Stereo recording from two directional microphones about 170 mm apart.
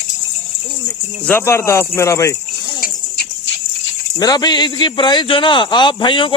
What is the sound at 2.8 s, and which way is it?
Horse, 70° left (ahead or behind).